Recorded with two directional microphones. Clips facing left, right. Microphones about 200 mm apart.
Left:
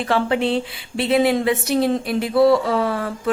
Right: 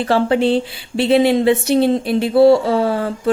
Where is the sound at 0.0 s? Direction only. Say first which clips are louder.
Right 4 dB; 35° right (ahead or behind).